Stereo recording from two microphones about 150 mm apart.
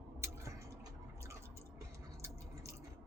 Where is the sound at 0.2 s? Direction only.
20° right (ahead or behind).